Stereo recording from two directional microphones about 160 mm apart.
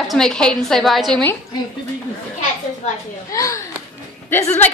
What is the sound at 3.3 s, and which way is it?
Speech, 20° left (ahead or behind).